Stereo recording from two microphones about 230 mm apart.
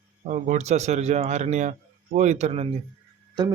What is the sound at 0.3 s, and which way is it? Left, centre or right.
Speech, right.